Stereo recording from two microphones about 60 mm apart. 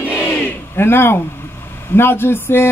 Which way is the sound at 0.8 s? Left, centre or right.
Left.